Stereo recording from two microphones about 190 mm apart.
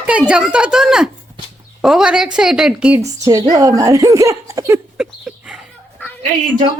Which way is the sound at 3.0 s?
20° right (ahead or behind).